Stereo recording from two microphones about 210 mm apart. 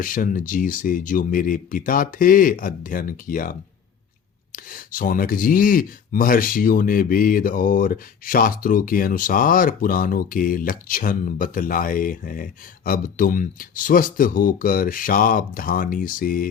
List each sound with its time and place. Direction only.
0.0 s speech: 40° left (ahead or behind)